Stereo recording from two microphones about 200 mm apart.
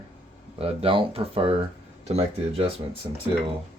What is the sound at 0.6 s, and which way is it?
Speech, 30° right (ahead or behind).